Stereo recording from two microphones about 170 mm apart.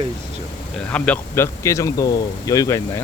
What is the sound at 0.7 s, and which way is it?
Speech, 5° left (ahead or behind).